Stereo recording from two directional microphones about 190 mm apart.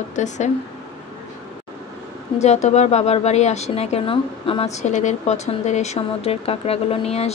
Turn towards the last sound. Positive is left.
turn(degrees=35)  # may be behind; listen again after turning